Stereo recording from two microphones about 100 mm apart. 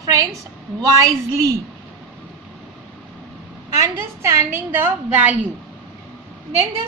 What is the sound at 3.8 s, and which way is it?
A woman's voice, 30° right (ahead or behind).